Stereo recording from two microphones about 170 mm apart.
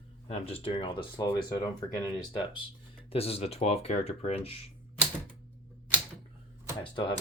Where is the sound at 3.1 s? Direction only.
35° left (ahead or behind).